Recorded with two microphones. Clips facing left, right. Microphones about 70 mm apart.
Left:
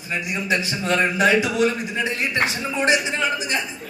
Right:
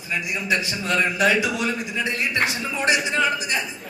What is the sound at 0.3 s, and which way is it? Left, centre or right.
A man's voice, left.